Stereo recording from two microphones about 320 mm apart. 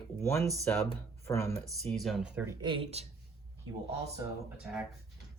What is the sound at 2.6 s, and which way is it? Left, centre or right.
Speech, centre.